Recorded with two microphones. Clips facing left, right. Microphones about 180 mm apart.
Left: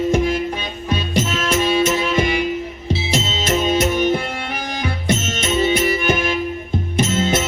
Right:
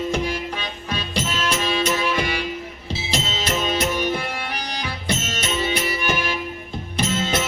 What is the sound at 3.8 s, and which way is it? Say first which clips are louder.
Music: left 5 dB; 50° left (ahead or behind).